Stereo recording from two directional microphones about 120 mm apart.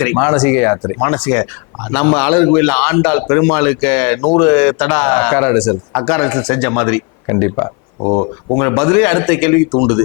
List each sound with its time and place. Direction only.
0.0 s speech: 10° left (ahead or behind)
8.5 s speech: 15° left (ahead or behind)